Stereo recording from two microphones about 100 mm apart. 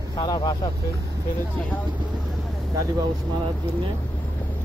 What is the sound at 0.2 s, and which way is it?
Speech, 40° left (ahead or behind).